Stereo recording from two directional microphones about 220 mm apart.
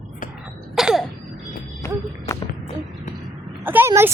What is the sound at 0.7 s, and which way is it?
Throat clearing, centre (ahead or behind).